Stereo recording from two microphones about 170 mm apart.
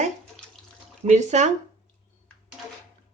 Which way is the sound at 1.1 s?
45° right (ahead or behind).